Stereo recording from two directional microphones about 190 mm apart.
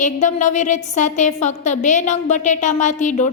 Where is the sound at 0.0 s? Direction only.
40° left (ahead or behind).